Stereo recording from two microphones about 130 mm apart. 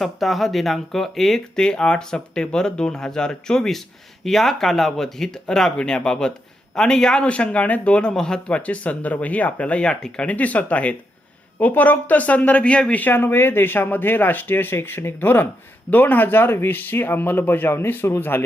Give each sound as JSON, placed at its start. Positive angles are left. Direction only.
{"t": 0.0, "sound": "a man's voice", "side_deg": 0}